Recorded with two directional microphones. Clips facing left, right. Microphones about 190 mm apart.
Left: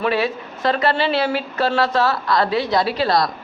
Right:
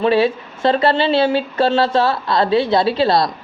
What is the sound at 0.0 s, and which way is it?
Speech, 30° right (ahead or behind).